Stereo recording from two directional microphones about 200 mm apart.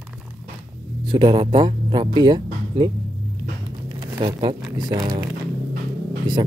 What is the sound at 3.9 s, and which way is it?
Speech, 20° right (ahead or behind).